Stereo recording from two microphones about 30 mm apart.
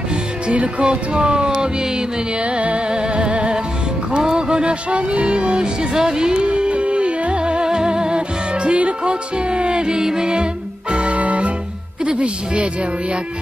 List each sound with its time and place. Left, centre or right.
0.5 s music: right
1.1 s music: right
2.4 s music: right
4.2 s a sound: right
5.2 s music: right
6.4 s music: right
8.7 s music: right
10.9 s music: right